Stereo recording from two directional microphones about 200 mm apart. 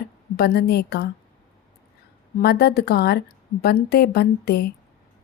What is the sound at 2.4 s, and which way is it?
Speech, 55° left (ahead or behind).